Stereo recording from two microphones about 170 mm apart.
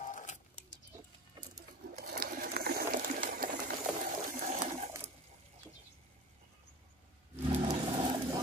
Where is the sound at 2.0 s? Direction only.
55° right (ahead or behind).